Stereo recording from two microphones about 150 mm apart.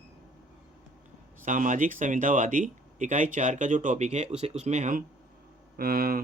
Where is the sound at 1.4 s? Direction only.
55° right (ahead or behind).